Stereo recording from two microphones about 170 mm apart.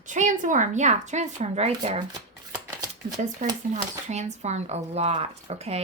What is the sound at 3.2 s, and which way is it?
Speech, 45° right (ahead or behind).